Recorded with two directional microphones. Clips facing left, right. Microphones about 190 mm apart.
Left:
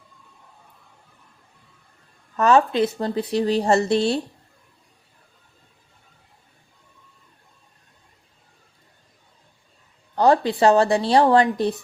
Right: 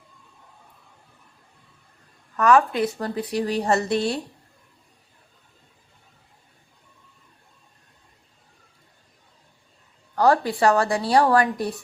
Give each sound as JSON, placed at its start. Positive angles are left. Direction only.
{"t": 2.3, "sound": "a woman's voice", "side_deg": 25}
{"t": 10.2, "sound": "a woman's voice", "side_deg": 20}